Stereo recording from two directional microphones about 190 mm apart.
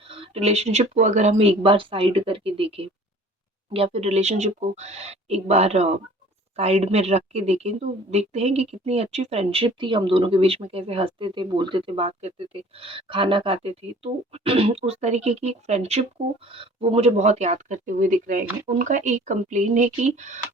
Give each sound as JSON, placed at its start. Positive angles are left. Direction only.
{"t": 0.0, "sound": "speech", "side_deg": -30}